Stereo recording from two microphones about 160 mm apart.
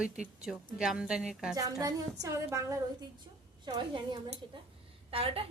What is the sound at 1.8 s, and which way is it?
A woman's voice, 20° right (ahead or behind).